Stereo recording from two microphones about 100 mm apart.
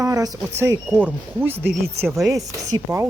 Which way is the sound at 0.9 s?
15° right (ahead or behind).